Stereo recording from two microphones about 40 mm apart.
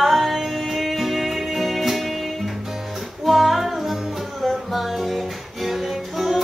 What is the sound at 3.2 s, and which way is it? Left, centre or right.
Music, centre.